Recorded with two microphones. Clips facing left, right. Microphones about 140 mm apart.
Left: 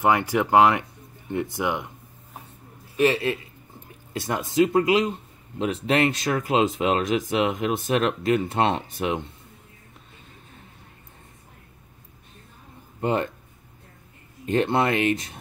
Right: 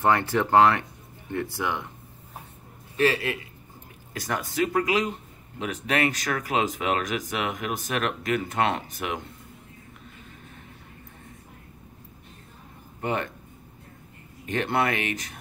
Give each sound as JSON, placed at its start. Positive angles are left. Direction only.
{"t": 0.0, "sound": "speech", "side_deg": 15}
{"t": 3.0, "sound": "speech", "side_deg": 25}
{"t": 13.0, "sound": "speech", "side_deg": 30}
{"t": 14.4, "sound": "speech", "side_deg": 30}